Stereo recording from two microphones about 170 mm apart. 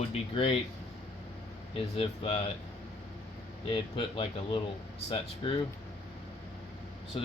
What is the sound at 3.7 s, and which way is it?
Speech, 30° left (ahead or behind).